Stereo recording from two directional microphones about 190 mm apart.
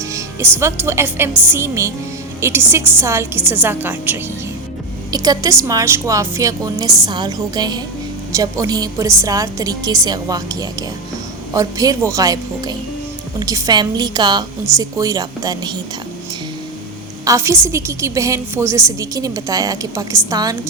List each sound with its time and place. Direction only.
0.0 s a woman's voice: 15° right (ahead or behind)
17.2 s a woman's voice: 15° right (ahead or behind)